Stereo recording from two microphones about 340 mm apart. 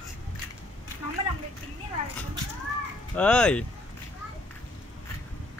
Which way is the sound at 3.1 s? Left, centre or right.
Centre.